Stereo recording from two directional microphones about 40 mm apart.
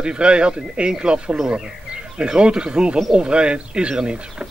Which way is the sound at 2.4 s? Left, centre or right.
Right.